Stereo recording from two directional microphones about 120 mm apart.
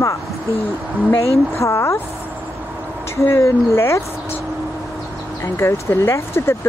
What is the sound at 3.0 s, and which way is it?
Speech, 20° left (ahead or behind).